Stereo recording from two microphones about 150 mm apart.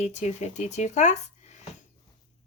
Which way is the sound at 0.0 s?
50° left (ahead or behind).